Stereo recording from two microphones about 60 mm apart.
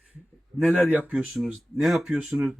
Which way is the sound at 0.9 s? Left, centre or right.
Right.